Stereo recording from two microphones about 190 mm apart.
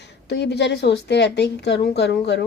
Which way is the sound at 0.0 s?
65° left (ahead or behind).